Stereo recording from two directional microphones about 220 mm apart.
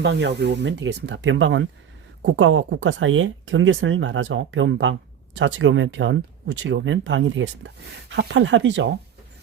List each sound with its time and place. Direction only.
0.0 s speech: 50° right (ahead or behind)